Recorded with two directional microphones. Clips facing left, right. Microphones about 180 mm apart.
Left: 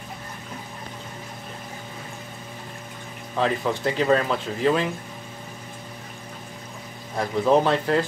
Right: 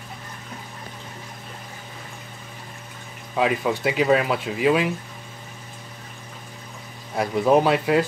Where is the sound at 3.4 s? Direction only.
10° right (ahead or behind).